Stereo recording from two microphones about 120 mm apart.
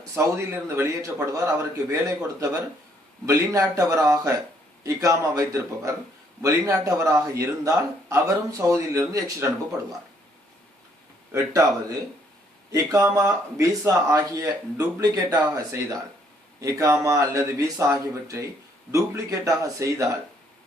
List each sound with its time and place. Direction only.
0.1 s a man's voice: 25° right (ahead or behind)
11.3 s a man's voice: 25° right (ahead or behind)
12.7 s a man's voice: 25° right (ahead or behind)